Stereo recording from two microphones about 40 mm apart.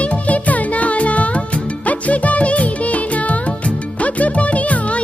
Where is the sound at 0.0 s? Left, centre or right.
Left.